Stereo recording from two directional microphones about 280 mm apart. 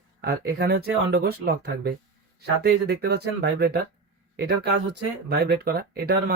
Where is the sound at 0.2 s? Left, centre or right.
Right.